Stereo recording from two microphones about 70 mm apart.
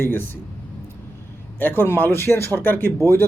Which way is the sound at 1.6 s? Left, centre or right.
Left.